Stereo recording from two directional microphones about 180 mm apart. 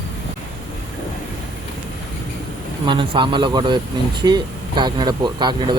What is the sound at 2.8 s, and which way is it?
Speech, 25° right (ahead or behind).